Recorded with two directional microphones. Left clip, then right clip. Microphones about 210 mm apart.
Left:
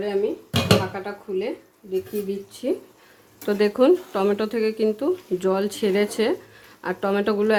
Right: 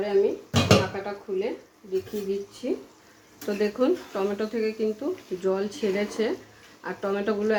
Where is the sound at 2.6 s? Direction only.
50° left (ahead or behind).